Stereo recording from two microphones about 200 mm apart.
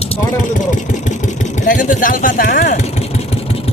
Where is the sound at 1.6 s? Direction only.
40° left (ahead or behind).